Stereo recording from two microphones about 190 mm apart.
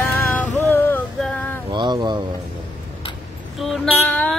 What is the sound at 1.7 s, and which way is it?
Speech, 25° right (ahead or behind).